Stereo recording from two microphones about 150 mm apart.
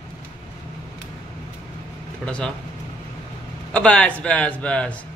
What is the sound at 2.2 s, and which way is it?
Speech, 5° left (ahead or behind).